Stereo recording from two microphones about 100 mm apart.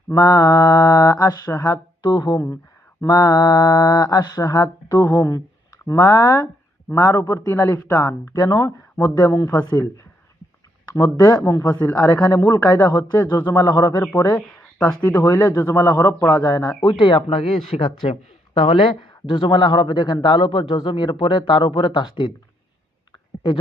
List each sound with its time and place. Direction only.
0.1 s speech: 35° left (ahead or behind)
2.0 s speech: 45° left (ahead or behind)
10.8 s speech: 40° left (ahead or behind)
13.1 s speech: 45° left (ahead or behind)
14.3 s speech: 10° left (ahead or behind)
14.8 s speech: 30° left (ahead or behind); by 18.9 s 70° left (ahead or behind)
19.3 s speech: 55° left (ahead or behind)